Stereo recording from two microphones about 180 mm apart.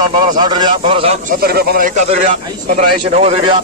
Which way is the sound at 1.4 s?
55° right (ahead or behind).